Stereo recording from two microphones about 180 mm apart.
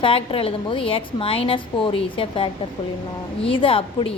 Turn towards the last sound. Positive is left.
turn(degrees=30)  # may be behind; listen again after turning